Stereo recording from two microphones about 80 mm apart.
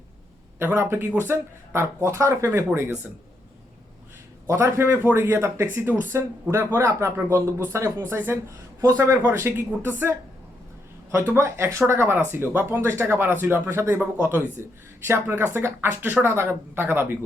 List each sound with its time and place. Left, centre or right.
0.6 s speech: right
4.4 s speech: right
8.4 s speech: right
9.2 s speech: right
11.3 s speech: right